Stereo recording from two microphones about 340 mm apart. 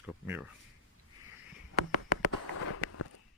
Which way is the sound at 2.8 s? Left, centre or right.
Left.